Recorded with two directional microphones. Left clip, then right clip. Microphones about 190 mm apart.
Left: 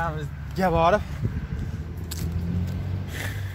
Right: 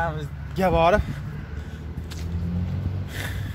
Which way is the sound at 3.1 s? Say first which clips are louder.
Even; 15° right (ahead or behind).